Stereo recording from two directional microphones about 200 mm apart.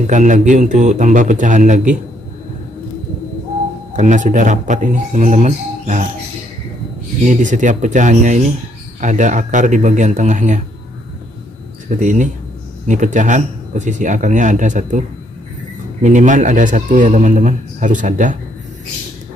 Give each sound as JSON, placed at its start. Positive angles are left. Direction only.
{"t": 0.0, "sound": "a man's voice", "side_deg": -40}
{"t": 3.9, "sound": "a man's voice", "side_deg": -40}
{"t": 7.2, "sound": "a man's voice", "side_deg": -40}
{"t": 11.9, "sound": "a man's voice", "side_deg": -40}